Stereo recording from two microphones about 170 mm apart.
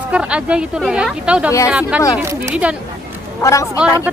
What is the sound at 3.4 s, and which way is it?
Speech, 20° left (ahead or behind).